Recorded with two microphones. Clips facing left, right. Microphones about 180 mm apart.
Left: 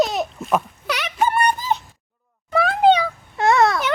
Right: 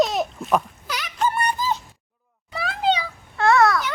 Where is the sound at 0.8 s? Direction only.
70° left (ahead or behind).